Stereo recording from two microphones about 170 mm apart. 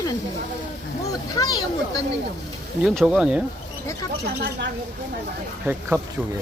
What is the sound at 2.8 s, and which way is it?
Speech, 5° right (ahead or behind).